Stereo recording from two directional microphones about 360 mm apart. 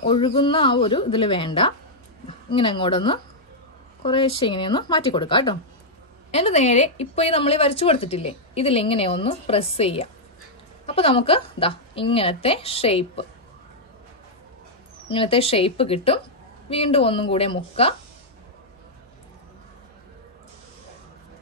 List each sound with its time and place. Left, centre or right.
0.0 s a woman's voice: centre
15.0 s speech: centre